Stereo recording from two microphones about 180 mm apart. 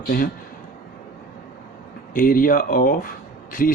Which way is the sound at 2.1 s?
50° left (ahead or behind).